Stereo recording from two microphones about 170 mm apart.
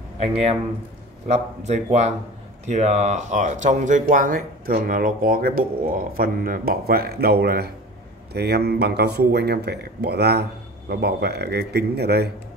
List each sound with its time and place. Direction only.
0.2 s speech: 40° right (ahead or behind); by 12.3 s 70° right (ahead or behind)